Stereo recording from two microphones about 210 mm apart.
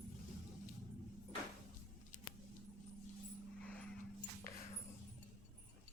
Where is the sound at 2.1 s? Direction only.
35° left (ahead or behind).